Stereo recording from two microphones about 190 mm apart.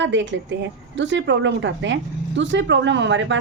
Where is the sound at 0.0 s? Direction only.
70° right (ahead or behind).